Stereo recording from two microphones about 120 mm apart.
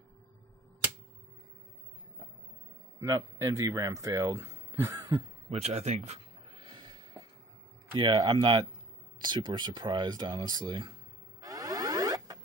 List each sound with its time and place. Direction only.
3.0 s speech: 25° right (ahead or behind)
5.5 s speech: 65° right (ahead or behind)
6.5 s snort: 40° right (ahead or behind)
7.9 s speech: 40° right (ahead or behind)
11.4 s a sound: 30° right (ahead or behind)